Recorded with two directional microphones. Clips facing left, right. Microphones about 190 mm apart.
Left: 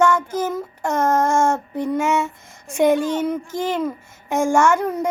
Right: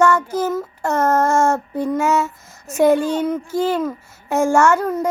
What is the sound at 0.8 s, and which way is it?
Speech, 10° left (ahead or behind).